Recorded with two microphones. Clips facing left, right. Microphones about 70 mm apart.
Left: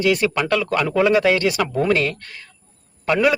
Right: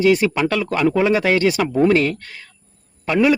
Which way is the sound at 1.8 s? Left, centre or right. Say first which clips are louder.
Right 4 dB; right.